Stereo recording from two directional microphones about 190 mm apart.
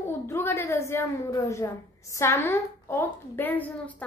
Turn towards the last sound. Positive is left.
turn(degrees=10)  # may be behind; listen again after turning